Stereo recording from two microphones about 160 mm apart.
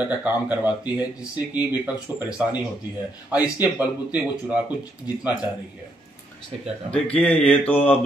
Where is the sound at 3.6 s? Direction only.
10° right (ahead or behind).